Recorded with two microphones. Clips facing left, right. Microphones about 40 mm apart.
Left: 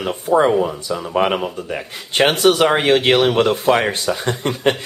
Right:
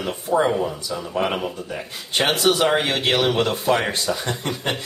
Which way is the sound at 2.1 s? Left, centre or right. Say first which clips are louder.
Left 5 dB; left.